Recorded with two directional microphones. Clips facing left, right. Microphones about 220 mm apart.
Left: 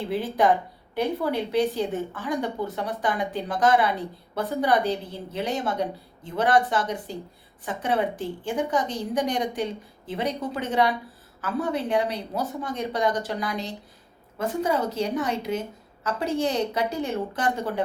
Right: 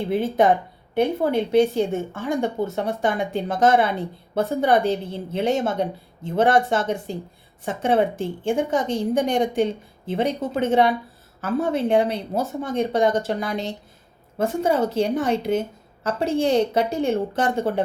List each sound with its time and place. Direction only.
0.1 s a woman's voice: 25° right (ahead or behind)